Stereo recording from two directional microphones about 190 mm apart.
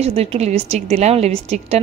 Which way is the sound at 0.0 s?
35° right (ahead or behind).